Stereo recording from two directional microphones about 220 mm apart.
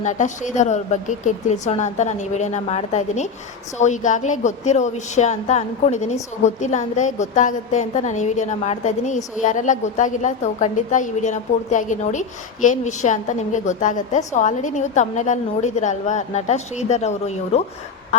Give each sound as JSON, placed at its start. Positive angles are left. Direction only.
{"t": 0.0, "sound": "a woman's voice", "side_deg": 35}